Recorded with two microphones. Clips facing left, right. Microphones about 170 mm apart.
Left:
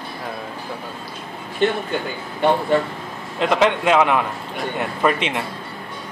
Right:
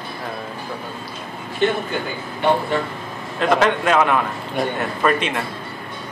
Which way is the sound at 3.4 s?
20° left (ahead or behind).